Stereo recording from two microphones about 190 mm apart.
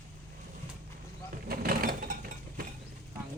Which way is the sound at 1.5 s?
50° right (ahead or behind).